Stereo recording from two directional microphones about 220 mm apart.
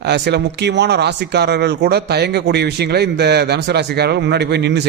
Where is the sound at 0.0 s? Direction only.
50° right (ahead or behind).